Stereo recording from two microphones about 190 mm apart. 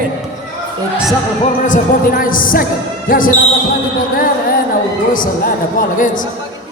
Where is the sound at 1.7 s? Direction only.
45° left (ahead or behind).